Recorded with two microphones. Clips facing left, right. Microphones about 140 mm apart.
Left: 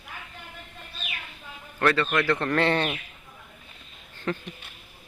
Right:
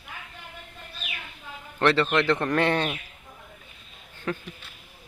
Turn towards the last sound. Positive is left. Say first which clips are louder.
# left 1 dB
turn(degrees=-5)  # may be behind; listen again after turning